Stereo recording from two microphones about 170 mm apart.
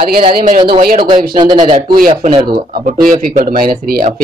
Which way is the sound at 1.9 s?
55° right (ahead or behind).